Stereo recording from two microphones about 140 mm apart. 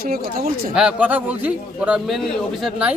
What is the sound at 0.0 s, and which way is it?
Speech, 90° right.